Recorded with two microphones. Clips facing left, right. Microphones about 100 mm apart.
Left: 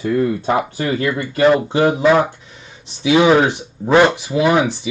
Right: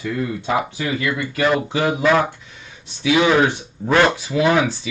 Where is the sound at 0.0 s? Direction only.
35° left (ahead or behind).